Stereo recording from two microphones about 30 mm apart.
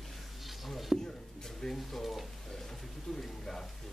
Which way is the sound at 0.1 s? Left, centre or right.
Centre.